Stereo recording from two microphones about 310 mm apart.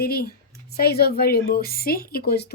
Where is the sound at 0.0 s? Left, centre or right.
Left.